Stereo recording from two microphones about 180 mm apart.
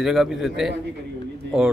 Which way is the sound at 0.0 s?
Centre (ahead or behind).